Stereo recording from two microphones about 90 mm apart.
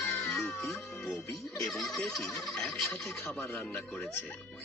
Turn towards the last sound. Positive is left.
turn(degrees=20)  # may be behind; listen again after turning